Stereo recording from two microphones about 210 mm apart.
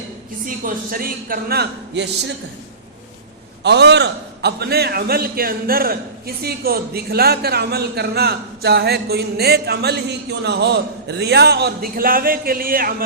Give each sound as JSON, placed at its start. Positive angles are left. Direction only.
{"t": 0.4, "sound": "a man's voice", "side_deg": -40}
{"t": 3.6, "sound": "a man's voice", "side_deg": -50}